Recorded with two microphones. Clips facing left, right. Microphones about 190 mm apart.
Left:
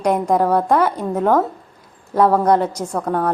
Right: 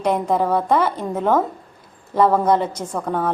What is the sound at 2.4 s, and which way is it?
Speech, 5° right (ahead or behind).